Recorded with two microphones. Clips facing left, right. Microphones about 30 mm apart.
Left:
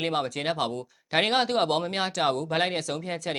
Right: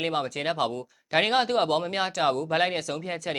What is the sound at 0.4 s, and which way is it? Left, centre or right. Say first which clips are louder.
Speech: right 1 dB; centre.